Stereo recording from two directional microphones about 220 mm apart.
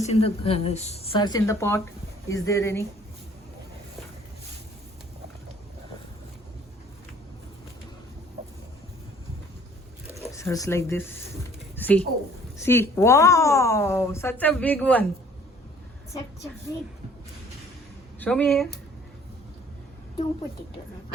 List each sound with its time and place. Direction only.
0.0 s speech: 30° left (ahead or behind); by 2.8 s 10° left (ahead or behind)
10.3 s a woman's voice: 15° left (ahead or behind)
18.2 s speech: 5° left (ahead or behind)